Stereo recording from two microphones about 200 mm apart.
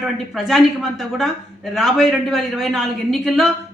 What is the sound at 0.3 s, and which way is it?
Speech, centre (ahead or behind).